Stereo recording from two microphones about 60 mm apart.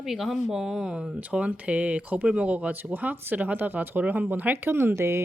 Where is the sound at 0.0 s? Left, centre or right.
Centre; by 4.5 s right.